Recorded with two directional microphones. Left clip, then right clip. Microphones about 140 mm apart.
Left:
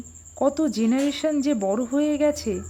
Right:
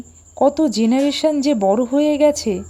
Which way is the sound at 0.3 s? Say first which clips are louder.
Right 7 dB; 20° right (ahead or behind).